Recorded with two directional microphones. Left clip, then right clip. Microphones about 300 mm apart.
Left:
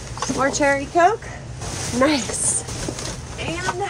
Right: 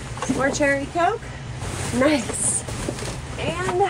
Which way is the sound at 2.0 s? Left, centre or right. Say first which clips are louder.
Left 1 dB; centre.